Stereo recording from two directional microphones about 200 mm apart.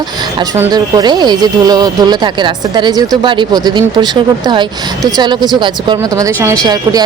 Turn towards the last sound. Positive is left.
turn(degrees=-20)  # may be behind; listen again after turning